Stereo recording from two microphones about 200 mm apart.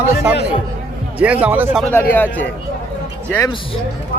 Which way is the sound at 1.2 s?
5° right (ahead or behind).